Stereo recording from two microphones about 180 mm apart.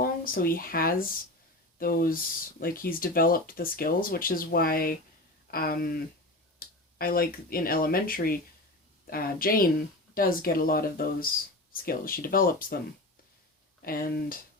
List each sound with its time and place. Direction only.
0.0 s speech: 55° left (ahead or behind)
13.8 s speech: 55° left (ahead or behind)